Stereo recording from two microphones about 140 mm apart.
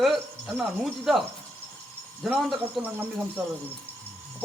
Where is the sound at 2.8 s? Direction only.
10° right (ahead or behind).